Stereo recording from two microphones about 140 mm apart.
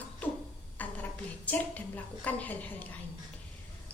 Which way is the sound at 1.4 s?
10° left (ahead or behind).